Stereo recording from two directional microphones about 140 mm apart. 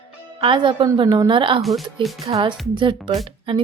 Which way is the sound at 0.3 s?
35° right (ahead or behind).